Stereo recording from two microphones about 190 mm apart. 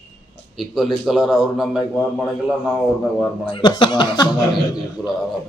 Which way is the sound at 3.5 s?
25° left (ahead or behind).